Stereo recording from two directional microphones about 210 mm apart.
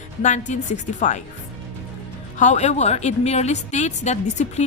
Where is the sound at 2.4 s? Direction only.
35° left (ahead or behind).